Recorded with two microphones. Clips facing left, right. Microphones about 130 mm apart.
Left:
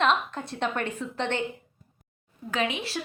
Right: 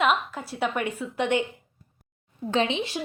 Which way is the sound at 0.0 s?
5° right (ahead or behind).